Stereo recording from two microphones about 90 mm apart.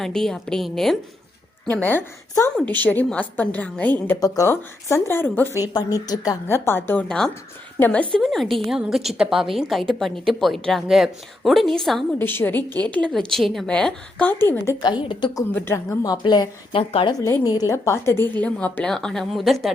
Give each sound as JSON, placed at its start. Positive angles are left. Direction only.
{"t": 0.0, "sound": "speech", "side_deg": 5}
{"t": 1.7, "sound": "a woman's voice", "side_deg": 20}
{"t": 5.7, "sound": "speech", "side_deg": 45}
{"t": 6.5, "sound": "a woman's voice", "side_deg": 25}
{"t": 8.1, "sound": "speech", "side_deg": 5}
{"t": 12.2, "sound": "a woman's voice", "side_deg": 25}
{"t": 13.3, "sound": "speech", "side_deg": 0}
{"t": 13.7, "sound": "a woman's voice", "side_deg": 10}
{"t": 14.3, "sound": "a woman's voice", "side_deg": 25}
{"t": 14.8, "sound": "a woman's voice", "side_deg": 55}
{"t": 15.7, "sound": "speech", "side_deg": 35}
{"t": 16.1, "sound": "a woman's voice", "side_deg": 55}
{"t": 16.7, "sound": "a woman's voice", "side_deg": 90}
{"t": 17.4, "sound": "a woman's voice", "side_deg": 45}